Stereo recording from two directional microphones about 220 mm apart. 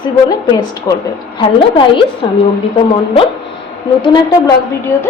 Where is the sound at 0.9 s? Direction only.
20° left (ahead or behind).